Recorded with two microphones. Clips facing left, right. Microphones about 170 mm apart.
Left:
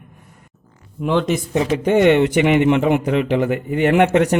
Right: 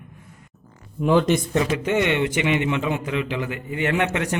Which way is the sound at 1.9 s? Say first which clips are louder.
Left 11 dB; 45° left (ahead or behind).